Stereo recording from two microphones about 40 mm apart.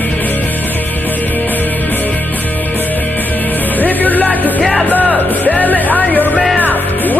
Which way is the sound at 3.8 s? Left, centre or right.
Left.